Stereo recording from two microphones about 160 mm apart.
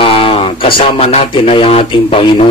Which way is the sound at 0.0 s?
35° left (ahead or behind).